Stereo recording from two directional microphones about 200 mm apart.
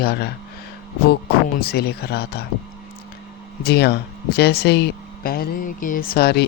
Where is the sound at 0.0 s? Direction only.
55° left (ahead or behind).